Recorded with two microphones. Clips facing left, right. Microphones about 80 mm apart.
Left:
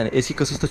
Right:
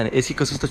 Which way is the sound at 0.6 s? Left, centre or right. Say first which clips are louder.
Even; right.